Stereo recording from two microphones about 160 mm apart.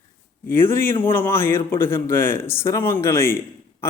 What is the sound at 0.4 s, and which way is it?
Speech, 15° left (ahead or behind).